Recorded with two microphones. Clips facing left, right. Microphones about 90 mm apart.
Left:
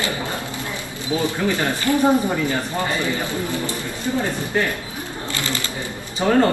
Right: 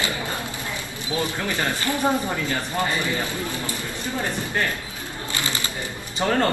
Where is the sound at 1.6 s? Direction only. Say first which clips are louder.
Left 4 dB; 15° left (ahead or behind).